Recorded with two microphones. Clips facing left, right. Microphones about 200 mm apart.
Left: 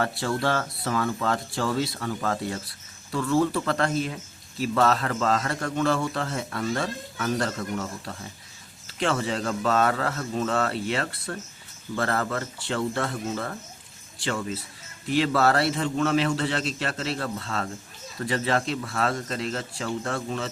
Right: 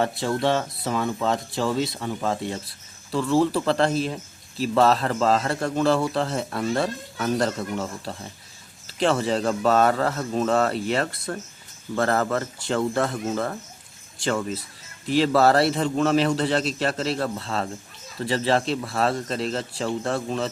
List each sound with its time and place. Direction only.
0.0 s speech: 20° right (ahead or behind)
3.1 s speech: 30° right (ahead or behind); by 14.6 s 50° right (ahead or behind)
15.0 s speech: 35° right (ahead or behind)